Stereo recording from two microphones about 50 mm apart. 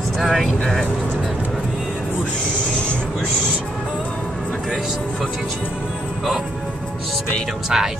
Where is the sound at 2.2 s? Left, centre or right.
Centre.